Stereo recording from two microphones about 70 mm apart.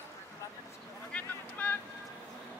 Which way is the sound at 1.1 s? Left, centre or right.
Left.